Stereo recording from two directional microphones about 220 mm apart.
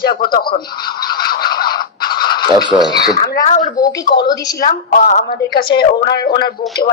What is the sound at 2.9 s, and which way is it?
Speech, 15° left (ahead or behind).